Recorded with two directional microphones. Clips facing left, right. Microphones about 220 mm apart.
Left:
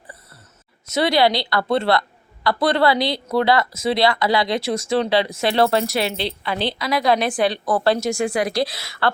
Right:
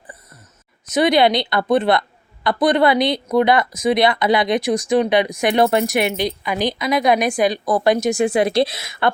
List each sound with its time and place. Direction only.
0.9 s a woman's voice: 15° right (ahead or behind)